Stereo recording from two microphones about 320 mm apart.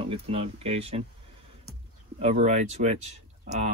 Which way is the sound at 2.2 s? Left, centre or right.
Right.